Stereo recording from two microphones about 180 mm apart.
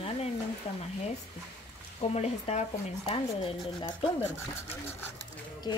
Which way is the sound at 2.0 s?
35° left (ahead or behind).